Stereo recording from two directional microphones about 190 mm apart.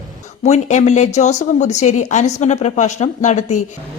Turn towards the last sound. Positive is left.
turn(degrees=40)  # may be behind; listen again after turning